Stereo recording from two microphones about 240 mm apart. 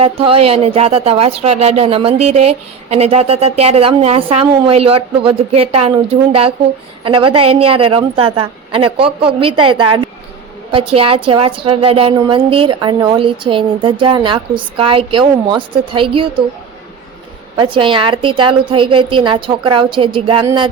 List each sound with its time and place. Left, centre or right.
0.0 s a woman's voice: right
17.6 s a woman's voice: right